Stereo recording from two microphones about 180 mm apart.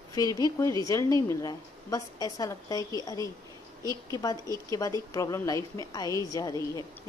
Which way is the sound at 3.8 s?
20° right (ahead or behind).